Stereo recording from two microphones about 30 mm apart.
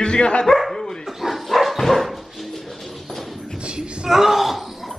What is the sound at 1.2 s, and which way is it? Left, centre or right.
Dog, centre.